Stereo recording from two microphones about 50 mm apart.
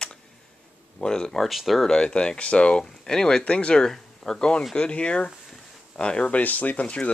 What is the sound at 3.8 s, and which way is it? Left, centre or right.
Speech, centre.